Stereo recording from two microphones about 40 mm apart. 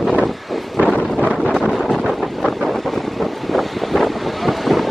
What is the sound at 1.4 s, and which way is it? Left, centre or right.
Wind noise, centre.